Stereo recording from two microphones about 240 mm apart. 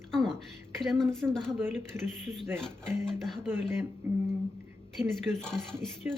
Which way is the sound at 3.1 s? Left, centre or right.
Centre.